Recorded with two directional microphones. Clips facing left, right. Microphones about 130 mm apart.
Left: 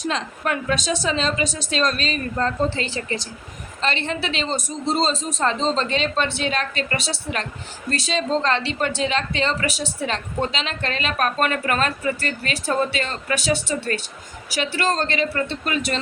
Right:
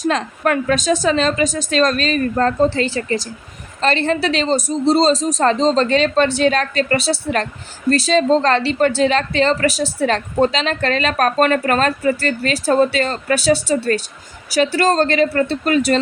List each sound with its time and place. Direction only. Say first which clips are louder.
0.0 s a woman's voice: right 7 dB; 50° right (ahead or behind)